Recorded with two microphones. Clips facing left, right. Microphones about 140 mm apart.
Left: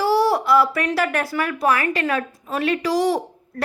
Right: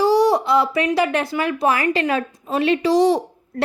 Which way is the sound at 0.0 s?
15° right (ahead or behind).